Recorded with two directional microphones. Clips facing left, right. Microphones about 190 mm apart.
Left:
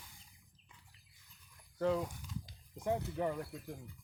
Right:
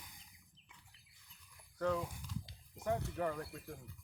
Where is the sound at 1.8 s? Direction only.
25° left (ahead or behind).